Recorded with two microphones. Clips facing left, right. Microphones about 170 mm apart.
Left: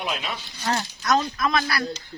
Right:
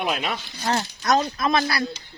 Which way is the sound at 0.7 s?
35° right (ahead or behind).